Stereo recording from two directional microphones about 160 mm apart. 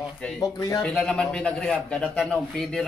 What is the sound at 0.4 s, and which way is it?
Speech, 20° left (ahead or behind).